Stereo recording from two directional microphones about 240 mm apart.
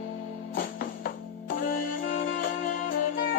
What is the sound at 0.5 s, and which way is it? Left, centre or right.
Music, left.